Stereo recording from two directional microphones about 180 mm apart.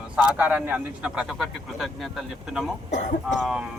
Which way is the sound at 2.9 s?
40° left (ahead or behind).